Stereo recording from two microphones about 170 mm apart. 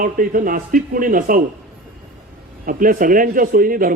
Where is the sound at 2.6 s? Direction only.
55° right (ahead or behind).